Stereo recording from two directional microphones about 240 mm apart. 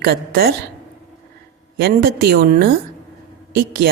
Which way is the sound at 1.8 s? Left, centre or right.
Right.